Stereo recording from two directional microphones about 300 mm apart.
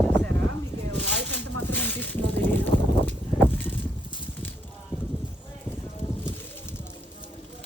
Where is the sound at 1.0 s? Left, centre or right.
Right.